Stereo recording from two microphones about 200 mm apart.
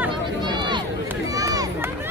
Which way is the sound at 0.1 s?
20° right (ahead or behind).